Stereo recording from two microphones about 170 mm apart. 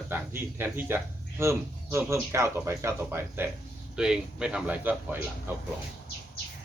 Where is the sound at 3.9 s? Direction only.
5° right (ahead or behind).